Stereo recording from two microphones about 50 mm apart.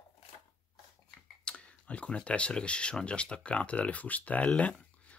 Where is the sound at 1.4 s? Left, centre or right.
Left.